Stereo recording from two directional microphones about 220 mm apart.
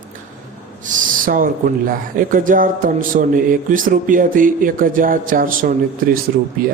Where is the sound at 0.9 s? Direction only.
35° right (ahead or behind).